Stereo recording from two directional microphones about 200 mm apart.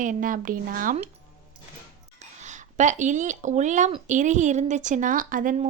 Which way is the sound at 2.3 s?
35° right (ahead or behind).